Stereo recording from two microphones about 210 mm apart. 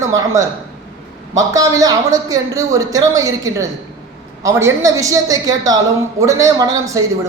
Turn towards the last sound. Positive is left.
turn(degrees=-15)  # may be behind; listen again after turning